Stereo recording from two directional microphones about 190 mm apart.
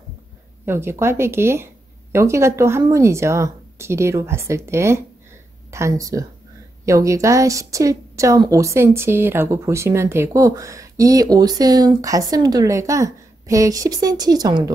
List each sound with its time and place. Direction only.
0.7 s a woman's voice: 15° right (ahead or behind)